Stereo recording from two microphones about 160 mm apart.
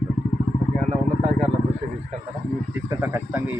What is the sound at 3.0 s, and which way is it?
Speech, 15° right (ahead or behind).